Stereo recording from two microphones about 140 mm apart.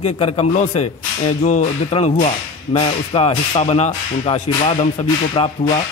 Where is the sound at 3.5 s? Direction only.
55° left (ahead or behind); by 5.5 s 40° left (ahead or behind).